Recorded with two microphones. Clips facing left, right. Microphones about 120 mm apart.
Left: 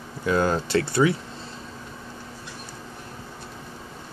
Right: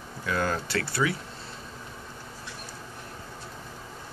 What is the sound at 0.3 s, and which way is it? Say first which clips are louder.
Speech: left 6 dB; 25° left (ahead or behind).